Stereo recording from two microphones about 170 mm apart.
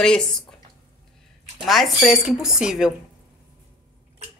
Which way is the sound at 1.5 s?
Centre (ahead or behind).